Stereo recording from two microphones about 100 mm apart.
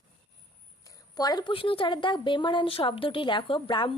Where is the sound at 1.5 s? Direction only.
60° left (ahead or behind).